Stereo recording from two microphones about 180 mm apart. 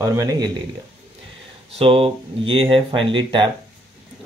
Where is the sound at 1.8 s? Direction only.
30° right (ahead or behind).